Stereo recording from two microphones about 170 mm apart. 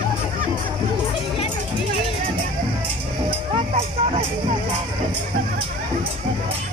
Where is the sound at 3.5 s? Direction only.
35° right (ahead or behind).